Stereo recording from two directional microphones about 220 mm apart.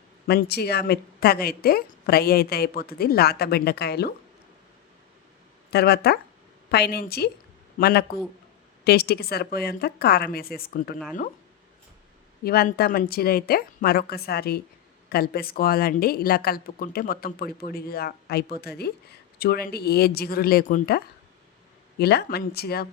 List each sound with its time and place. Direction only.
0.3 s a woman's voice: 45° left (ahead or behind)
5.7 s a woman's voice: 45° left (ahead or behind)
12.5 s a woman's voice: 45° left (ahead or behind)